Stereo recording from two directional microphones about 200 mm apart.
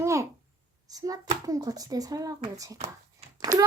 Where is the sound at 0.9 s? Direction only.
20° right (ahead or behind).